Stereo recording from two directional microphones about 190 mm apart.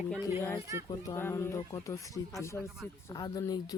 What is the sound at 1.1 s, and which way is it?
Speech, 15° left (ahead or behind).